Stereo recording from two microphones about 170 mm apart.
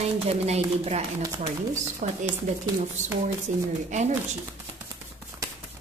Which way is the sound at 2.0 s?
50° right (ahead or behind).